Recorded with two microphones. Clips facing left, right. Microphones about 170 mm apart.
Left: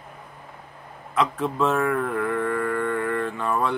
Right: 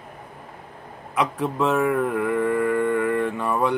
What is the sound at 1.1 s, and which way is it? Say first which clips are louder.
Mantra: even; 15° right (ahead or behind).